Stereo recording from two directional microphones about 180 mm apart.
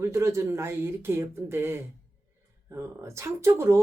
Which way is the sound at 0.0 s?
15° right (ahead or behind).